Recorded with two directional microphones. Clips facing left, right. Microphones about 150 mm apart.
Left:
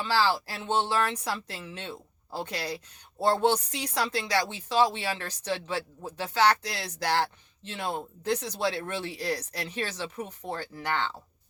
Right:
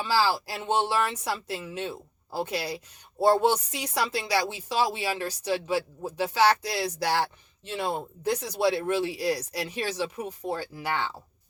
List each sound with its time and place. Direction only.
0.0 s speech: 10° right (ahead or behind)